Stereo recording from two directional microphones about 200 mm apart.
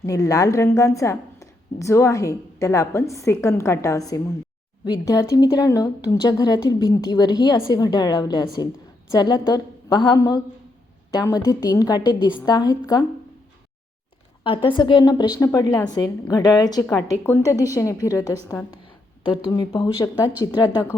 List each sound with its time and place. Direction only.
0.0 s a woman's voice: 15° left (ahead or behind)
14.4 s a woman's voice: 25° left (ahead or behind)
20.0 s a woman's voice: 5° left (ahead or behind)
20.4 s a woman's voice: 20° left (ahead or behind)